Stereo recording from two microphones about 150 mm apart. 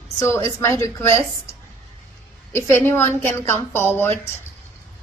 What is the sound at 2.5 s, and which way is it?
A woman's voice, 15° left (ahead or behind).